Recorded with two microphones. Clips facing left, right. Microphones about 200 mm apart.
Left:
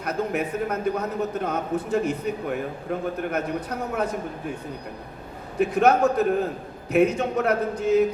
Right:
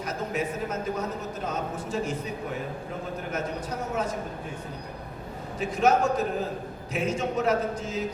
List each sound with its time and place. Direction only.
0.0 s a man's voice: 60° left (ahead or behind)
5.5 s a man's voice: 60° left (ahead or behind)